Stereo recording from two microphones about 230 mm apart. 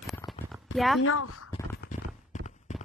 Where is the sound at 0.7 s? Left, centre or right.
Centre.